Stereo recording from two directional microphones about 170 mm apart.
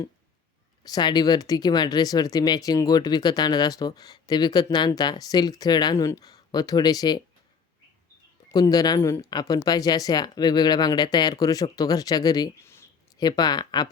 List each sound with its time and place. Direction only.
0.9 s speech: 25° left (ahead or behind)
8.4 s speech: 20° left (ahead or behind)